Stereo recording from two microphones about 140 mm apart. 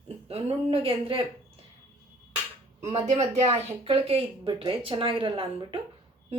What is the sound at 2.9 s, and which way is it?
Speech, 50° right (ahead or behind).